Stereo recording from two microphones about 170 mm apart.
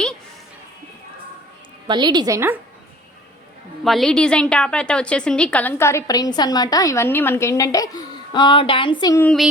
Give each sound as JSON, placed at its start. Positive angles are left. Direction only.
{"t": 1.9, "sound": "a woman's voice", "side_deg": -25}
{"t": 3.8, "sound": "a woman's voice", "side_deg": 0}
{"t": 9.2, "sound": "child singing", "side_deg": 0}